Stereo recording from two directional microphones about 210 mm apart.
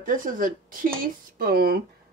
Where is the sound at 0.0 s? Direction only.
40° right (ahead or behind).